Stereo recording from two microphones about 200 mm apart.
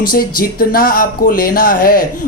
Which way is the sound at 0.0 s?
45° left (ahead or behind).